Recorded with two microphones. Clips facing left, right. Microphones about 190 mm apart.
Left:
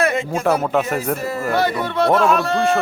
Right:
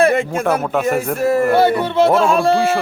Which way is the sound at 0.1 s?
55° right (ahead or behind).